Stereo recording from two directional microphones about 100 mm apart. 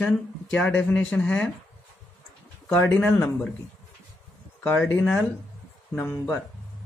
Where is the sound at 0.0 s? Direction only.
10° left (ahead or behind).